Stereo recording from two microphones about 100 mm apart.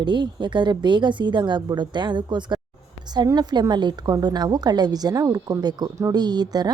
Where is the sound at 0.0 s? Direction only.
50° right (ahead or behind).